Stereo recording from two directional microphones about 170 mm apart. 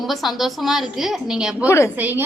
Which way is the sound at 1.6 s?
15° left (ahead or behind).